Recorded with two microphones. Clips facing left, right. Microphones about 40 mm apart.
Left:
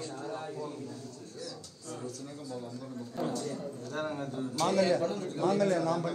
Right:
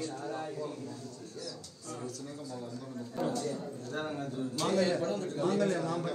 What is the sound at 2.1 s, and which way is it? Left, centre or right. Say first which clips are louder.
Speech: even; left.